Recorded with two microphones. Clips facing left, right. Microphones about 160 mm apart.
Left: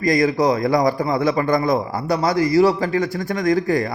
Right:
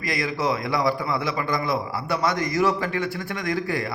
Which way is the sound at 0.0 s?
40° left (ahead or behind).